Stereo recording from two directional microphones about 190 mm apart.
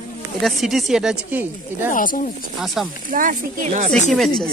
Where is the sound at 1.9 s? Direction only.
45° left (ahead or behind).